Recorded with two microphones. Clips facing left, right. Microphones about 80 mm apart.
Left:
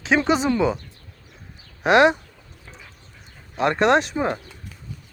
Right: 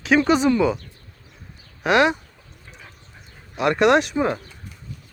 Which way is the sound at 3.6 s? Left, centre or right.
Left.